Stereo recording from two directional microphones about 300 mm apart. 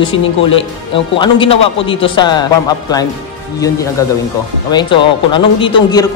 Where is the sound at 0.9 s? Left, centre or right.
Centre.